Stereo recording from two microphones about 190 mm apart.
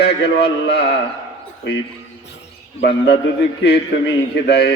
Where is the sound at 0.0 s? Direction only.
60° left (ahead or behind).